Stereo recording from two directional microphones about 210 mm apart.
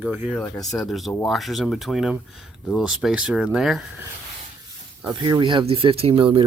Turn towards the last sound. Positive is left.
turn(degrees=-25)  # may be behind; listen again after turning